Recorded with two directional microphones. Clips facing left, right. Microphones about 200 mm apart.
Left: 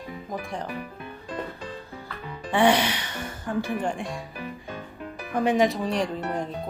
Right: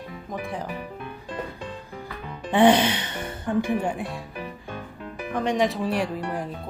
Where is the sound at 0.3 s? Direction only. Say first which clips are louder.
Right 2 dB; 5° right (ahead or behind).